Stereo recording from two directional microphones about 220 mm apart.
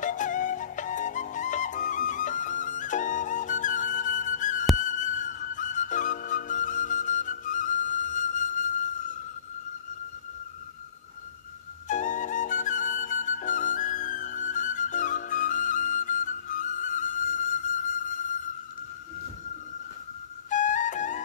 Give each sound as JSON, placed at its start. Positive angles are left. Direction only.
{"t": 0.0, "sound": "flute", "side_deg": 35}
{"t": 4.7, "sound": "music", "side_deg": 35}
{"t": 11.9, "sound": "flute", "side_deg": 35}
{"t": 20.4, "sound": "flute", "side_deg": 35}